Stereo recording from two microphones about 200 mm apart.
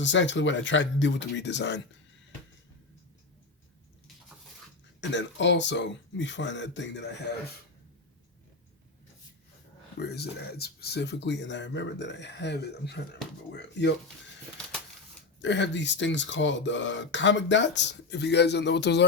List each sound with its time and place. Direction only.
0.0 s speech: 65° left (ahead or behind)
4.9 s speech: 65° left (ahead or behind)
10.0 s speech: 55° left (ahead or behind)
15.4 s speech: 60° left (ahead or behind)